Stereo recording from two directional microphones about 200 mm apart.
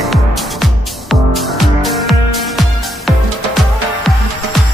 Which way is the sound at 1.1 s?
Centre (ahead or behind).